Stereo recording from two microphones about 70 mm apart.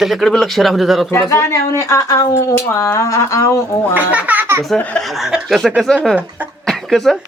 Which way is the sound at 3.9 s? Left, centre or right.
Right.